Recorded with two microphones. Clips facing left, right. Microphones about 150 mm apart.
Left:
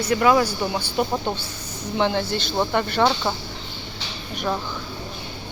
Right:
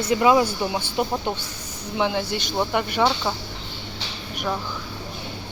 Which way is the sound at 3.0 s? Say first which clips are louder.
Left 1 dB; 5° left (ahead or behind).